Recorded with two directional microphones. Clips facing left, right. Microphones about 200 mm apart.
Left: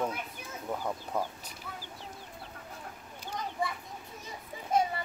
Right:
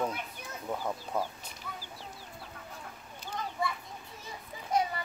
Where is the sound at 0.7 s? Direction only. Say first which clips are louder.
Even; centre (ahead or behind).